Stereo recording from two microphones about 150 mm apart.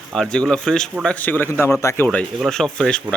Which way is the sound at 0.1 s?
5° left (ahead or behind).